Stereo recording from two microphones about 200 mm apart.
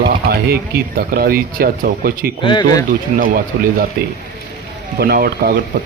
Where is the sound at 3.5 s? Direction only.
55° right (ahead or behind).